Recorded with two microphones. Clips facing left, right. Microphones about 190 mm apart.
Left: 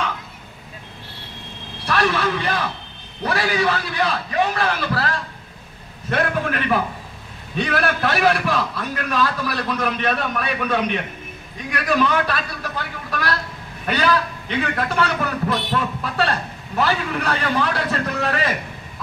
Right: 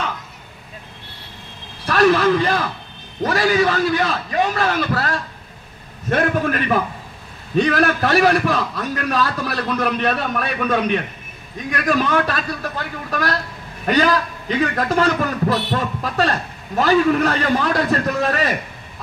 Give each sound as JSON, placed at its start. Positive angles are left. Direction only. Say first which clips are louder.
{"t": 1.9, "sound": "a man's voice", "louder": "right 6 dB", "side_deg": -40}